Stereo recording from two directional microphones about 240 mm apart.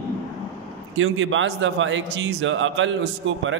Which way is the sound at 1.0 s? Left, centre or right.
Right.